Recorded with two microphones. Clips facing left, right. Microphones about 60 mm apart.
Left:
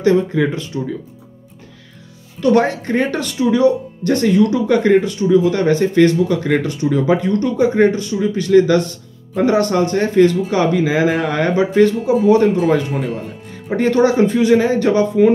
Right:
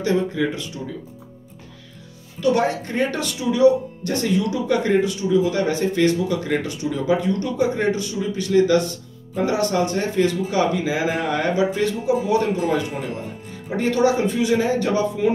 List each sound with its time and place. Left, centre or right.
0.0 s speech: left
2.5 s speech: left